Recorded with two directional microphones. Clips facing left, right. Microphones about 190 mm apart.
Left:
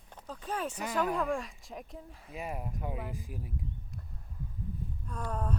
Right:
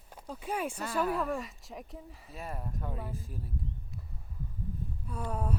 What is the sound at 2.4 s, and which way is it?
Speech, 15° left (ahead or behind).